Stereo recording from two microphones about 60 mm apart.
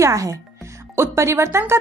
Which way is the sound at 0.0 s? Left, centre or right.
Right.